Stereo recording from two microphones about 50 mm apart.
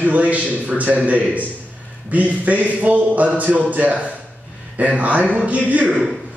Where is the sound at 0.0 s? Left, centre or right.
Right.